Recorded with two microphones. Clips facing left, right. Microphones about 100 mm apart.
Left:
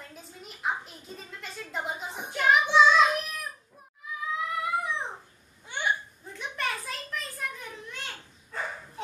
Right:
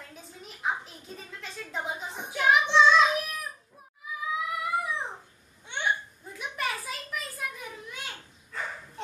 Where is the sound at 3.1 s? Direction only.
Centre (ahead or behind).